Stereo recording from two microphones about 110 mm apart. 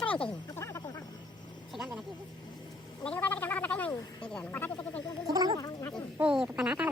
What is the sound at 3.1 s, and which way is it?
Gargling, 15° left (ahead or behind).